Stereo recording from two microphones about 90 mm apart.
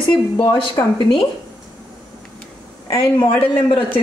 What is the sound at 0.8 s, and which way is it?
Speech, 35° left (ahead or behind).